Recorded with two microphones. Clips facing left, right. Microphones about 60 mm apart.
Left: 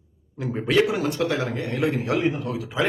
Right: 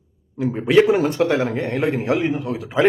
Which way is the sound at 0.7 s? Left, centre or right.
Right.